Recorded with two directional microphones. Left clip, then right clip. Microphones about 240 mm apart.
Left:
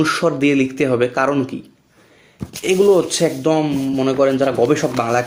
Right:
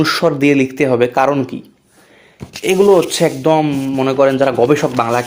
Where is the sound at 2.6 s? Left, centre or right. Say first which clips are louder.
Right 3 dB; right.